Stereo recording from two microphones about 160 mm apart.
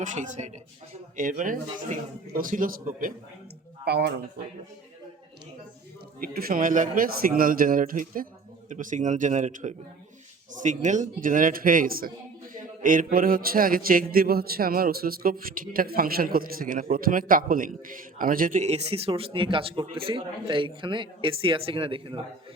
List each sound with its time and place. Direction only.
0.0 s a man's voice: 50° right (ahead or behind)
3.8 s speech: 90° right
6.2 s a man's voice: 70° right (ahead or behind); by 22.2 s 35° right (ahead or behind)